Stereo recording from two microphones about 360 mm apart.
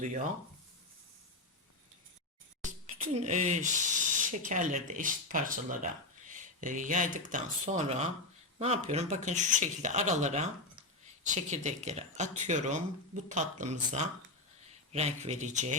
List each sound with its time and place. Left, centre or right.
0.0 s speech: right
2.6 s speech: centre